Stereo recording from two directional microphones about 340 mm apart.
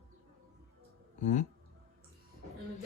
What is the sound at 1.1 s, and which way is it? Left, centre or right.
Speech, left.